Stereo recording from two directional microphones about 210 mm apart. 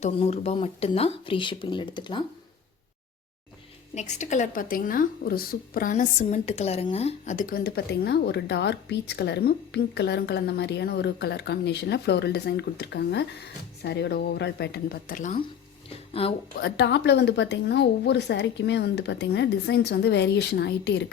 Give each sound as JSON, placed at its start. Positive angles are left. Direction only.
{"t": 0.0, "sound": "speech", "side_deg": 30}
{"t": 3.9, "sound": "speech", "side_deg": 35}
{"t": 15.9, "sound": "speech", "side_deg": 25}
{"t": 16.6, "sound": "speech", "side_deg": 50}